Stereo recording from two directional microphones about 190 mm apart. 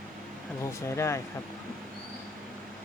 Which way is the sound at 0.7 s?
15° left (ahead or behind).